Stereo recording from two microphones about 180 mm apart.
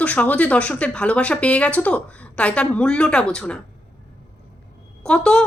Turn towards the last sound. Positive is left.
turn(degrees=5)  # may be behind; listen again after turning